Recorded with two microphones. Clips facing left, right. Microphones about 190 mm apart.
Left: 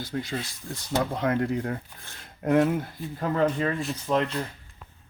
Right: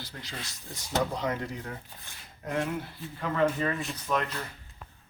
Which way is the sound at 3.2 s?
40° left (ahead or behind).